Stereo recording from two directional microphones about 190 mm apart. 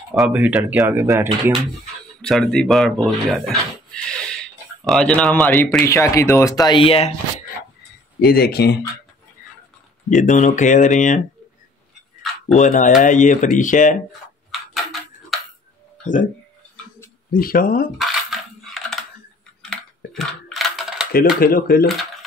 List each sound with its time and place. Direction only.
0.1 s speech: 5° right (ahead or behind)
2.2 s speech: centre (ahead or behind)
3.9 s a sound: 5° left (ahead or behind)
4.8 s speech: 5° left (ahead or behind); by 7.1 s 30° left (ahead or behind)
8.2 s speech: 55° left (ahead or behind)
10.0 s speech: 40° left (ahead or behind)
12.4 s speech: 40° left (ahead or behind)
14.5 s tick-tock: centre (ahead or behind)
17.3 s speech: 50° left (ahead or behind)
17.9 s coin: centre (ahead or behind)
20.2 s typing: centre (ahead or behind)
21.1 s speech: 50° left (ahead or behind)